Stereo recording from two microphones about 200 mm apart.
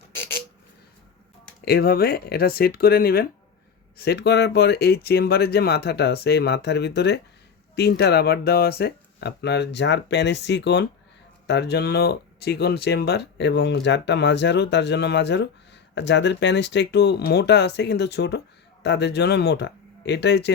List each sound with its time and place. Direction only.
1.6 s speech: 50° left (ahead or behind)